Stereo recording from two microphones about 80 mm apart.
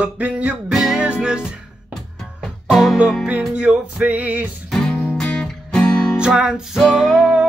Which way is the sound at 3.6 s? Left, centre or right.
Centre.